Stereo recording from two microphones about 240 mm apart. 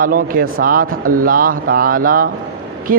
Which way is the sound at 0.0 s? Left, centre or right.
Right.